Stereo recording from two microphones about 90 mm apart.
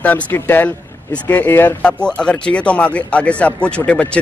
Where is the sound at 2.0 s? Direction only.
10° left (ahead or behind).